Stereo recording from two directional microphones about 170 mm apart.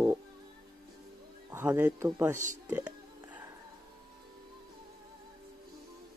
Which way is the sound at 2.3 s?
45° right (ahead or behind).